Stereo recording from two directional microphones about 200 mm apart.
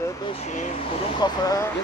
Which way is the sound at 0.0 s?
25° left (ahead or behind).